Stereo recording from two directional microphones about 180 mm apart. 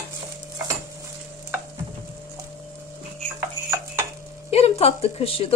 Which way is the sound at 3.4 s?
15° right (ahead or behind).